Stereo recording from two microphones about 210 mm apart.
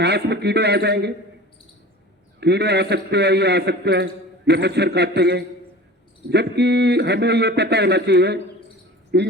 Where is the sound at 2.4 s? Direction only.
55° right (ahead or behind).